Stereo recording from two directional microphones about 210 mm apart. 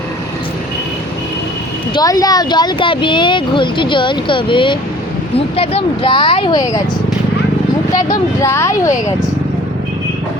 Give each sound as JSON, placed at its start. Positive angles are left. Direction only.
{"t": 2.0, "sound": "speech", "side_deg": 15}
{"t": 8.4, "sound": "speech", "side_deg": 15}